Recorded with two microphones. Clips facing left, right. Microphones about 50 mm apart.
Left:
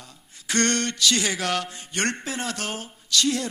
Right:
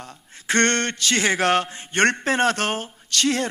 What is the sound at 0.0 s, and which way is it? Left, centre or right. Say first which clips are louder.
A man's voice: right 7 dB; right.